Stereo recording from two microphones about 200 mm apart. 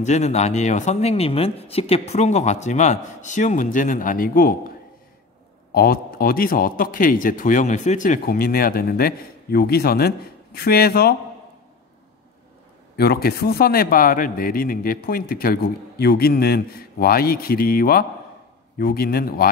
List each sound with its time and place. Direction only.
0.0 s speech: 35° left (ahead or behind)
12.9 s speech: 50° left (ahead or behind)